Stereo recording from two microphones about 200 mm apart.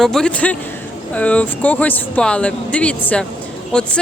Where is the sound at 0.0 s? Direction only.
Centre (ahead or behind).